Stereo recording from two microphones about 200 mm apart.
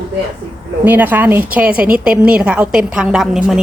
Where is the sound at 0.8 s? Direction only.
10° right (ahead or behind).